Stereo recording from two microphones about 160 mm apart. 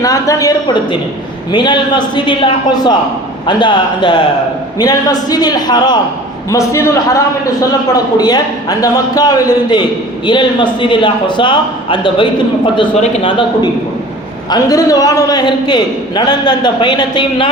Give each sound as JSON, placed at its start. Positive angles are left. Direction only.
{"t": 0.0, "sound": "a man's voice", "side_deg": 20}